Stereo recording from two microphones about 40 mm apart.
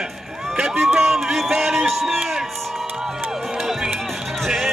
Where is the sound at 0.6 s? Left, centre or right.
Centre.